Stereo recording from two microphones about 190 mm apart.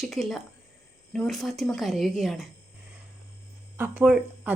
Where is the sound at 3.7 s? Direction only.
10° right (ahead or behind).